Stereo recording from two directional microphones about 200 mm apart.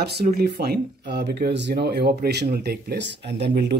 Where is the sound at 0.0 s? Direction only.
55° right (ahead or behind).